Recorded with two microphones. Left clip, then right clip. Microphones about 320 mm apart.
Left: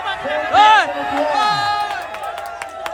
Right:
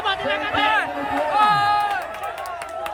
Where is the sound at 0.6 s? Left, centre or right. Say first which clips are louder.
Left 9 dB; centre.